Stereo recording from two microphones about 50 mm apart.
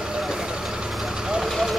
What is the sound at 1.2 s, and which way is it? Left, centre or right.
Vehicle, centre.